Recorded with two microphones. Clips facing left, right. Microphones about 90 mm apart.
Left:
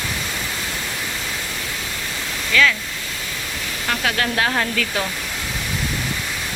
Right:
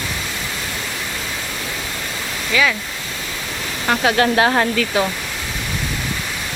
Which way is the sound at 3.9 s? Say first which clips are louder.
Right 6 dB; 30° right (ahead or behind).